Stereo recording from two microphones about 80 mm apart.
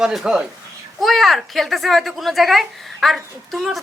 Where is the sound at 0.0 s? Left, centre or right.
Centre.